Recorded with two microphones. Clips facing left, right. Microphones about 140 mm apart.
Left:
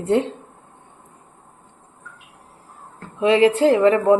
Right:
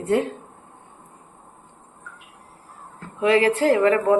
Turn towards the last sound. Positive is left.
turn(degrees=20)  # may be behind; listen again after turning